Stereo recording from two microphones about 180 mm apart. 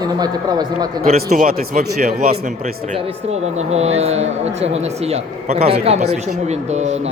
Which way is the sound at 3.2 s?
35° right (ahead or behind).